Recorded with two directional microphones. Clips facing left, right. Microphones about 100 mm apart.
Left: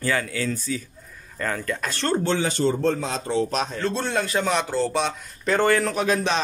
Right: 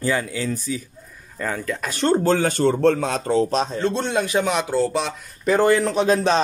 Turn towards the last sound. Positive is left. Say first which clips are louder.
# right 4 dB
turn(degrees=-30)  # may be behind; listen again after turning